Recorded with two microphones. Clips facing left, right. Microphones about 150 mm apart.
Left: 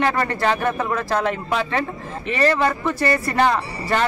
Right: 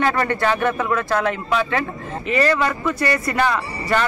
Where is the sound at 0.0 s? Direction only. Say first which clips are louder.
Right 1 dB; 35° left (ahead or behind).